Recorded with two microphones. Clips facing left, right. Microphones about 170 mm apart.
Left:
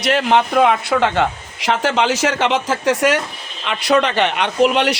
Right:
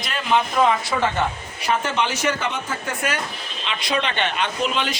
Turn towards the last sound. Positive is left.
turn(degrees=70)  # may be behind; listen again after turning